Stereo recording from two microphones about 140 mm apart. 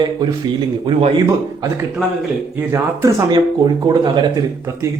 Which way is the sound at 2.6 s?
20° right (ahead or behind).